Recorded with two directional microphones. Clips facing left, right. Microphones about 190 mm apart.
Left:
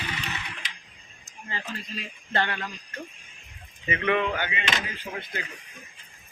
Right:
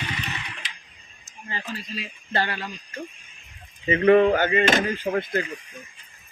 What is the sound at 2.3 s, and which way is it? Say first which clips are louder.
Speech: right 1 dB; 35° right (ahead or behind).